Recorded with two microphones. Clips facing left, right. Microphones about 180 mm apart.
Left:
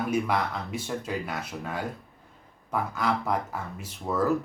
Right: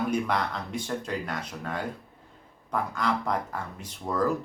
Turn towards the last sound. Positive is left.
turn(degrees=5)  # may be behind; listen again after turning